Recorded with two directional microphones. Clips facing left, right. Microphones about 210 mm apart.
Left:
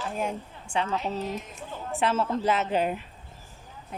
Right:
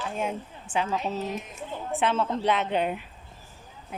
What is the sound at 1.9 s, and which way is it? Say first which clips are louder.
A woman's voice: even; centre (ahead or behind).